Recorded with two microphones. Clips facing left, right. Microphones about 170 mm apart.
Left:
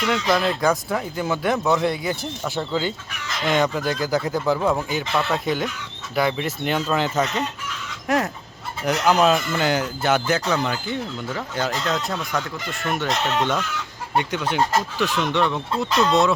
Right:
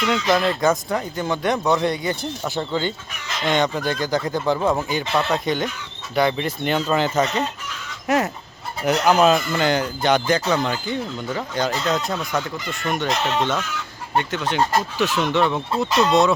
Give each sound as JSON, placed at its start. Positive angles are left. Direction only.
{"t": 0.0, "sound": "speech", "side_deg": 0}
{"t": 14.9, "sound": "speech", "side_deg": 0}